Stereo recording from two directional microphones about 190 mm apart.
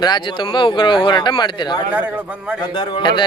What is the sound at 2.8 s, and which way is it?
Speech, 25° left (ahead or behind).